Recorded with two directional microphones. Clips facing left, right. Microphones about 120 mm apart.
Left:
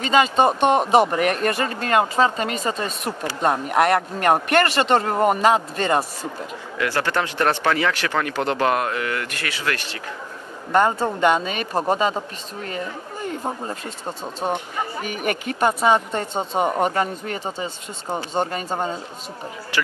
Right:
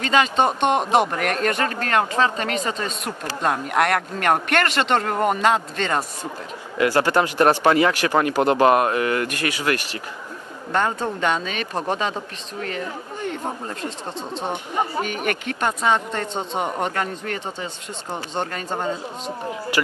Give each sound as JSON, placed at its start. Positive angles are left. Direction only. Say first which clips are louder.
{"t": 0.0, "sound": "speech", "louder": "left 2 dB", "side_deg": 5}
{"t": 7.1, "sound": "speech", "louder": "right 4 dB", "side_deg": -15}
{"t": 10.7, "sound": "speech", "louder": "left 4 dB", "side_deg": 10}
{"t": 14.0, "sound": "speech", "louder": "left 4 dB", "side_deg": 10}